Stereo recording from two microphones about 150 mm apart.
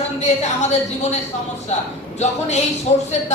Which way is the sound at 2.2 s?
50° left (ahead or behind).